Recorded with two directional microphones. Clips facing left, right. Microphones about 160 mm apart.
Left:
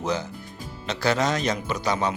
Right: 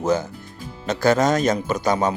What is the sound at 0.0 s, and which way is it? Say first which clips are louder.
Speech: right 6 dB; 50° right (ahead or behind).